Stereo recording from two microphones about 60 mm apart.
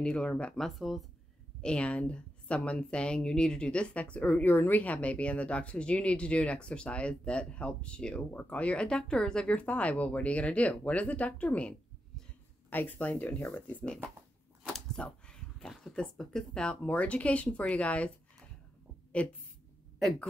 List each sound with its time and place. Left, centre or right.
0.0 s speech: centre
0.6 s speech: centre
1.6 s speech: centre
15.0 s a sound: centre
15.8 s speech: centre
19.2 s speech: left